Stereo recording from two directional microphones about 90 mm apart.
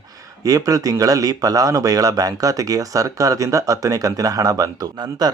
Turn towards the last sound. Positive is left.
turn(degrees=-45)  # may be behind; listen again after turning